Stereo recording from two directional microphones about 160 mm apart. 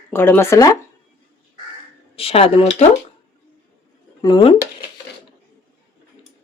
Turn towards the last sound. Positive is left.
turn(degrees=30)  # may be behind; listen again after turning